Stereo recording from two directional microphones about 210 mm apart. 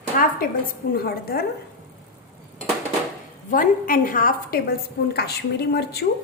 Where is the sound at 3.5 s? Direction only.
40° left (ahead or behind).